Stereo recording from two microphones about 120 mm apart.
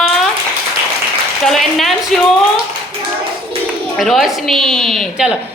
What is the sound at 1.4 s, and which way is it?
Speech, centre (ahead or behind).